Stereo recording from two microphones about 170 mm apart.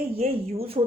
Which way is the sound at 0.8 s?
35° right (ahead or behind).